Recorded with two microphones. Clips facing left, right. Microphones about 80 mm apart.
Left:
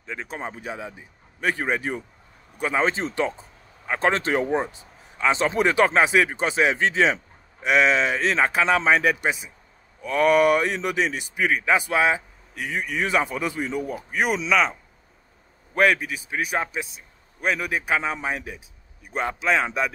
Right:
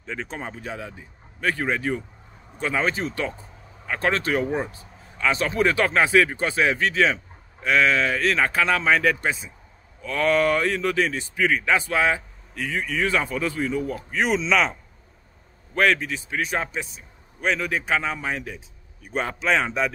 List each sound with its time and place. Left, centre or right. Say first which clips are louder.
0.0 s speech: right 1 dB; centre
0.4 s a man's voice: left 1 dB; centre
19.0 s speech: even; centre